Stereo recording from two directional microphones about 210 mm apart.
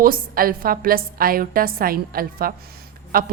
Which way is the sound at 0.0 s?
45° right (ahead or behind).